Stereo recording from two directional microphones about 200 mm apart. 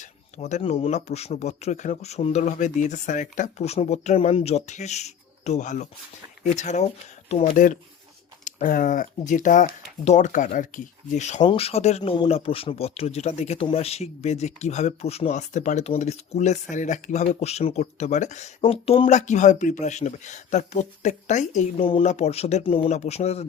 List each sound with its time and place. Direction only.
0.0 s speech: 35° left (ahead or behind)